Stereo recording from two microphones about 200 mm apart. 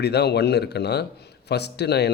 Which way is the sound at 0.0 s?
55° left (ahead or behind).